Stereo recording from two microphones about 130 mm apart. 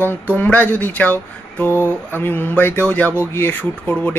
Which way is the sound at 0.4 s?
15° left (ahead or behind).